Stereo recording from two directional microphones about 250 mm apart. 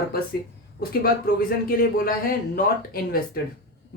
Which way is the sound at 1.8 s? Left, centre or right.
Left.